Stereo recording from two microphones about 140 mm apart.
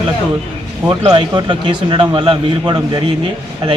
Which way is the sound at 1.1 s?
35° right (ahead or behind).